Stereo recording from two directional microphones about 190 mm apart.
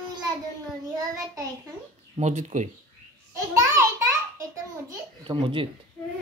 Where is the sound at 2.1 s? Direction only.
40° right (ahead or behind).